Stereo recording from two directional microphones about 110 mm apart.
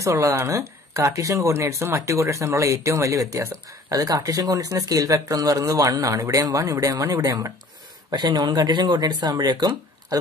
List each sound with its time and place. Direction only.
0.0 s speech: 30° right (ahead or behind)